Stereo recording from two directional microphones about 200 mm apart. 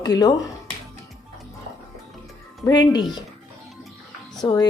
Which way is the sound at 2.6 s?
20° left (ahead or behind).